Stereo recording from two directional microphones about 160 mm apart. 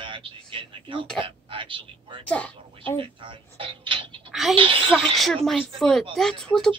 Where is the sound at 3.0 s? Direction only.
30° right (ahead or behind).